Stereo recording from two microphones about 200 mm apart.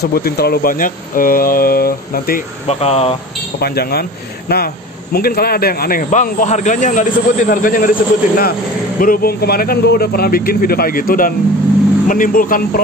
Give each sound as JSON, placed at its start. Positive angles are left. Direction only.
{"t": 0.0, "sound": "a man's voice", "side_deg": 50}
{"t": 2.7, "sound": "speech", "side_deg": 30}
{"t": 3.6, "sound": "a man's voice", "side_deg": 50}